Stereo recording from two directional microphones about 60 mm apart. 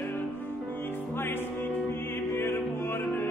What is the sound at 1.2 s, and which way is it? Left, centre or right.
Music, left.